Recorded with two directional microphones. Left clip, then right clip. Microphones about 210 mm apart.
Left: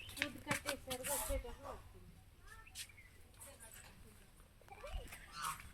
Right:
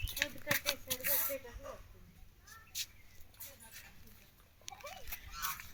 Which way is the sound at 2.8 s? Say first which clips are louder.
Right 9 dB; 50° right (ahead or behind).